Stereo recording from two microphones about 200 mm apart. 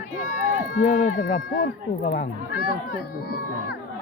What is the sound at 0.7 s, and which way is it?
Speech, 40° left (ahead or behind).